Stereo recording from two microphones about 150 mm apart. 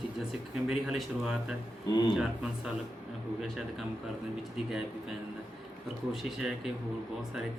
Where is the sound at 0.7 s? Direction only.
5° right (ahead or behind).